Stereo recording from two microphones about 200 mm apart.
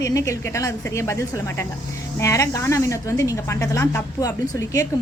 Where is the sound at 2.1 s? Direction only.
15° left (ahead or behind).